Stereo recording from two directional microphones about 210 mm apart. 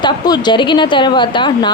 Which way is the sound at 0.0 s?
20° left (ahead or behind).